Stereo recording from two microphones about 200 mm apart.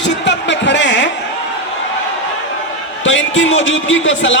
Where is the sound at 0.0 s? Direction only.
65° left (ahead or behind).